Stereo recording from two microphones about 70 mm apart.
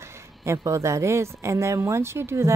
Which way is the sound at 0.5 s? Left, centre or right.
Right.